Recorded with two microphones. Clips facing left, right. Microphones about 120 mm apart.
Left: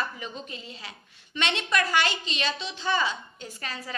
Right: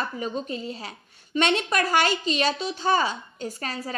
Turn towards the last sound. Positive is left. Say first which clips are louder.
# right 5 dB
turn(degrees=-40)  # may be behind; listen again after turning